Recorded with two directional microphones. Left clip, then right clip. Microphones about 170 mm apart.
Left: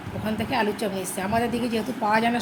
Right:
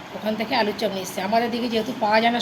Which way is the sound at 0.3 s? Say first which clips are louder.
Right 3 dB; 15° left (ahead or behind).